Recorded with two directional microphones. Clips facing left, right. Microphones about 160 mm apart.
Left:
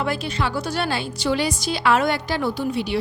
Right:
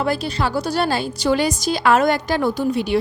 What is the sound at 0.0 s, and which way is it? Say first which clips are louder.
A woman's voice: right 3 dB; 40° right (ahead or behind).